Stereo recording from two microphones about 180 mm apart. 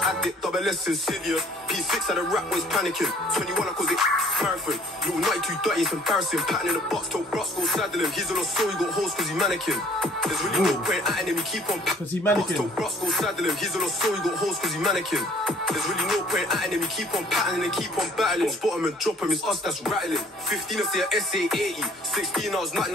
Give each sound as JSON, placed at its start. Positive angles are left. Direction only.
{"t": 0.0, "sound": "music", "side_deg": 0}